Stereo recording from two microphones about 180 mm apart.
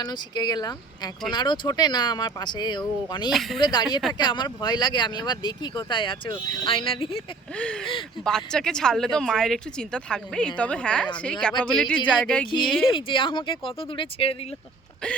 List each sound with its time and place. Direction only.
0.0 s speech: 25° left (ahead or behind)
3.2 s speech: centre (ahead or behind)
3.6 s speech: 20° left (ahead or behind)
7.5 s speech: 5° left (ahead or behind)
12.8 s speech: 30° left (ahead or behind)